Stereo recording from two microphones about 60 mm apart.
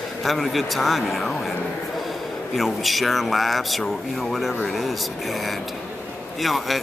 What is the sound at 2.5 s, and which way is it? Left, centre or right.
A man's voice, centre.